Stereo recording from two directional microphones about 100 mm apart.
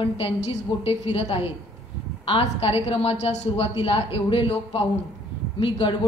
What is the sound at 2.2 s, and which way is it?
A woman's voice, 70° left (ahead or behind).